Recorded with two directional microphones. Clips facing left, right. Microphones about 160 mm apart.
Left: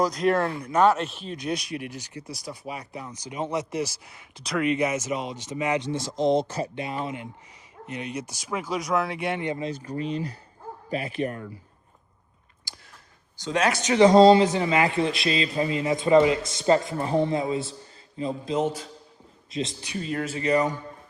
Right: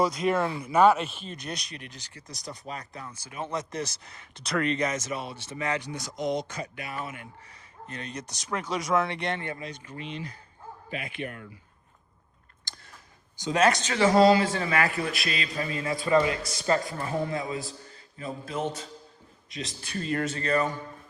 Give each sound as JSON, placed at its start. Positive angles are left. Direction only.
{"t": 0.0, "sound": "speech", "side_deg": 0}
{"t": 6.8, "sound": "a man's voice", "side_deg": 20}
{"t": 7.9, "sound": "speech", "side_deg": 10}
{"t": 9.4, "sound": "a man's voice", "side_deg": 20}
{"t": 9.6, "sound": "speech", "side_deg": 35}
{"t": 12.7, "sound": "a sound", "side_deg": 10}
{"t": 13.4, "sound": "speech", "side_deg": -5}
{"t": 13.7, "sound": "a man's voice", "side_deg": 15}
{"t": 19.9, "sound": "speech", "side_deg": 5}
{"t": 20.4, "sound": "speech", "side_deg": 15}